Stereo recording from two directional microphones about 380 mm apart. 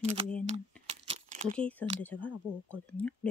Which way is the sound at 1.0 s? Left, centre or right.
Centre.